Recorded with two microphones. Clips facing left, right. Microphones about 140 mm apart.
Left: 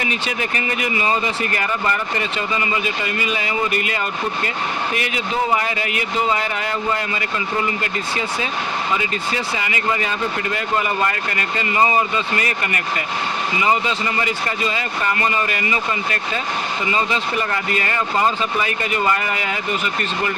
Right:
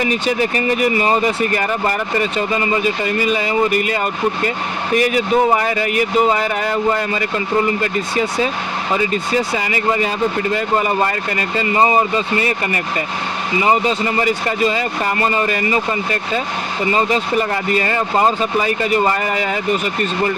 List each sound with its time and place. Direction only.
0.0 s speech: 40° right (ahead or behind)
5.5 s speech: 40° right (ahead or behind)
9.6 s speech: 35° right (ahead or behind)